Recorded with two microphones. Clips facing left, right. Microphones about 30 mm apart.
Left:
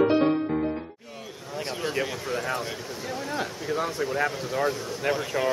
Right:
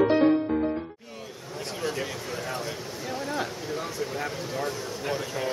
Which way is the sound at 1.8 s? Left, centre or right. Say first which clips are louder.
Left 2 dB; centre.